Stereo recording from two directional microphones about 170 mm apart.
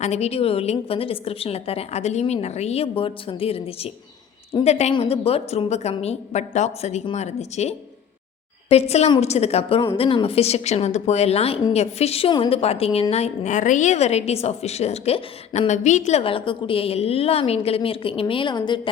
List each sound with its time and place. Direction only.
0.0 s a woman's voice: 40° left (ahead or behind)